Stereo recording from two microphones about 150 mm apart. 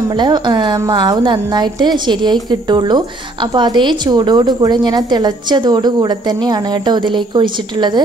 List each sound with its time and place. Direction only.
0.1 s a woman's voice: 30° right (ahead or behind)